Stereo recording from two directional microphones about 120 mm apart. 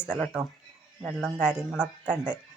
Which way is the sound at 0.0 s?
15° left (ahead or behind).